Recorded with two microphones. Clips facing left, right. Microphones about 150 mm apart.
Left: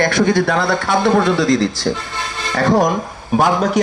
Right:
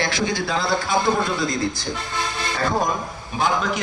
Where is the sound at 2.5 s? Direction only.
90° left.